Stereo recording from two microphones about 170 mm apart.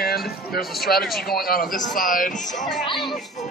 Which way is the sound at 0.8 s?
65° left (ahead or behind).